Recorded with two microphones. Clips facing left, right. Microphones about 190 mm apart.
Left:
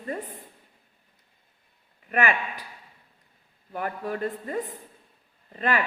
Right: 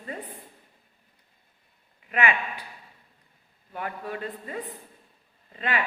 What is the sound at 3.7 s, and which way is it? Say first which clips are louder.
A man's voice: left 3 dB; 45° left (ahead or behind).